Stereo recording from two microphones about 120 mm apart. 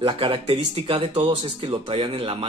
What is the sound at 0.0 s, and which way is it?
Speech, 45° right (ahead or behind).